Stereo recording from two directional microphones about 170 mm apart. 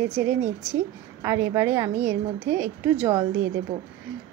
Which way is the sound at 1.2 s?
20° right (ahead or behind).